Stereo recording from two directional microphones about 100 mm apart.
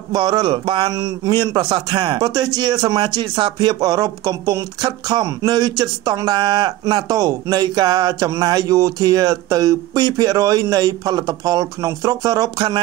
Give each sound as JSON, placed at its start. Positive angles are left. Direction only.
{"t": 0.1, "sound": "speech", "side_deg": -50}
{"t": 0.8, "sound": "speech", "side_deg": -40}